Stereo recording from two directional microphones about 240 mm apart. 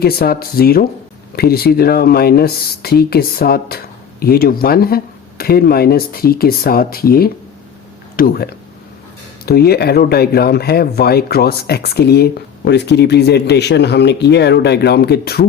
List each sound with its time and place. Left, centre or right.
0.0 s speech: left